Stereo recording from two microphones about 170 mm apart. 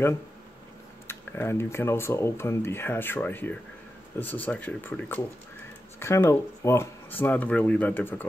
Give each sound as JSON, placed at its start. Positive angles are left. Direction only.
{"t": 1.0, "sound": "speech", "side_deg": 15}